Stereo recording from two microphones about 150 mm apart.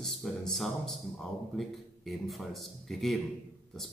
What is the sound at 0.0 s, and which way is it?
Speech, centre (ahead or behind).